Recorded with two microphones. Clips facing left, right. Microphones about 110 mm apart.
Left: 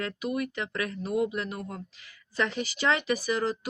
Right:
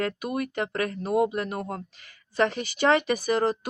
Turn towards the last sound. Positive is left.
turn(degrees=-55)  # may be behind; listen again after turning